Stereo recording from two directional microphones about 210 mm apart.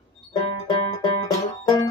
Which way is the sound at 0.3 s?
20° left (ahead or behind).